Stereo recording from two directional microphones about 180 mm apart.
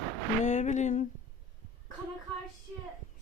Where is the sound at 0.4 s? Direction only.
40° left (ahead or behind).